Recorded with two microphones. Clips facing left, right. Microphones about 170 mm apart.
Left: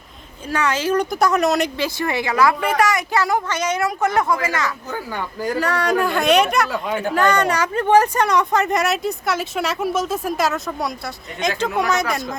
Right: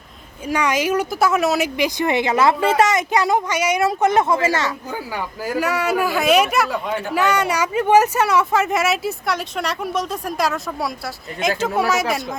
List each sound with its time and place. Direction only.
0.4 s a woman's voice: 10° right (ahead or behind)
1.7 s a woman's voice: 15° right (ahead or behind)
3.8 s a woman's voice: 20° right (ahead or behind)
4.9 s speech: 5° right (ahead or behind)